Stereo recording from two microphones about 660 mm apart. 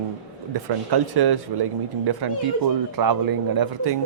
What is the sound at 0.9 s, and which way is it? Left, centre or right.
Speech, right.